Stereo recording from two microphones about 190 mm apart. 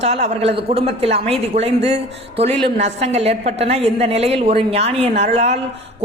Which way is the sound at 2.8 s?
35° right (ahead or behind).